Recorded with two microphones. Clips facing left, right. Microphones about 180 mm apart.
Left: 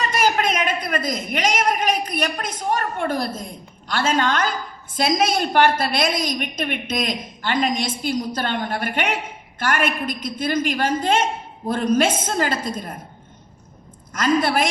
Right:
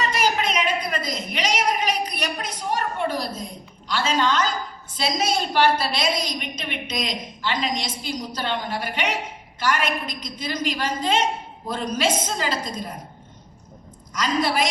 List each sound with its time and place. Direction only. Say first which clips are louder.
0.0 s a sound: left 2 dB; 50° left (ahead or behind)
3.8 s a woman's voice: left 2 dB; 50° left (ahead or behind)
14.1 s a woman's voice: left 4 dB; 50° left (ahead or behind)